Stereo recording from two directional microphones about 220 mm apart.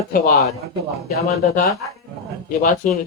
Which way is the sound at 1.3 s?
30° left (ahead or behind).